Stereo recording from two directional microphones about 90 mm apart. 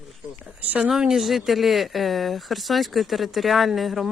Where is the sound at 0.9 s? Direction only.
5° right (ahead or behind).